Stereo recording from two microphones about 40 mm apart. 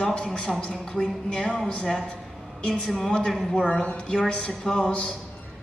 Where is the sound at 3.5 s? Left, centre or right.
Left.